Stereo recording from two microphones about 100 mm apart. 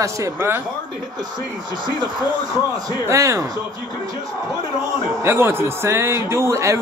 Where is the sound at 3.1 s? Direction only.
30° right (ahead or behind).